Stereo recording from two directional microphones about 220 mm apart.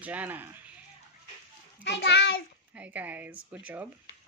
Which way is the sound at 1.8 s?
50° left (ahead or behind).